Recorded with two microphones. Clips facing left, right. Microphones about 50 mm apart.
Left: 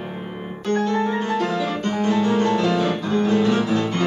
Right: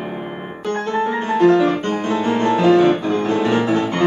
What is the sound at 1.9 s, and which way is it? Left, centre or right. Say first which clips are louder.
Music: right 1 dB; right.